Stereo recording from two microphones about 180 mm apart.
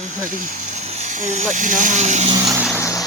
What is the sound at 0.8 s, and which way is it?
Speech, 40° right (ahead or behind).